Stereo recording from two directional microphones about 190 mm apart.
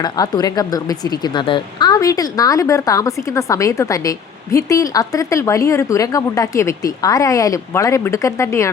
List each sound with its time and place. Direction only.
0.0 s speech: 20° left (ahead or behind)